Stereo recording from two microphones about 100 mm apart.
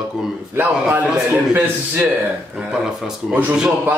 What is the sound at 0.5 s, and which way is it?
A man's voice, 20° right (ahead or behind).